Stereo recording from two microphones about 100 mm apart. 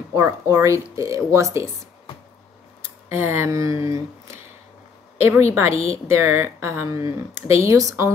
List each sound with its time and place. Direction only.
0.1 s speech: 30° right (ahead or behind)
3.1 s speech: 25° right (ahead or behind)
5.1 s a woman's voice: 25° right (ahead or behind)